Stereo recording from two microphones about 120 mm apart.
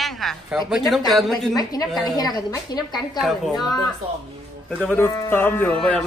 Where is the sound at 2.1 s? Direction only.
35° left (ahead or behind).